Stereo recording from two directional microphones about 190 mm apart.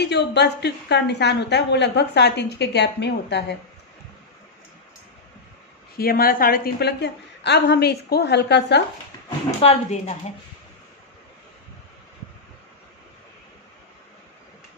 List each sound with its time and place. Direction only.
0.0 s a woman's voice: 60° left (ahead or behind)
6.0 s a woman's voice: 50° left (ahead or behind)
9.6 s speech: 35° left (ahead or behind)